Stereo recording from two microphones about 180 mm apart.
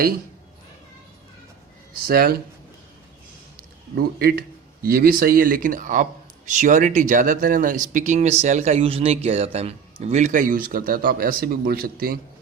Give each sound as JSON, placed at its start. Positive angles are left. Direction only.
{"t": 2.0, "sound": "speech", "side_deg": -60}
{"t": 3.9, "sound": "speech", "side_deg": -55}